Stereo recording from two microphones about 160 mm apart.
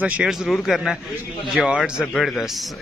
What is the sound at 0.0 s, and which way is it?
A man's voice, 5° right (ahead or behind).